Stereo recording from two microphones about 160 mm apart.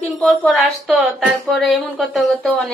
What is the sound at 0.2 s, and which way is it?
A woman's voice, 10° left (ahead or behind).